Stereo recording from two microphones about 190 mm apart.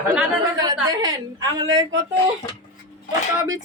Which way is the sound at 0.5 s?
20° right (ahead or behind).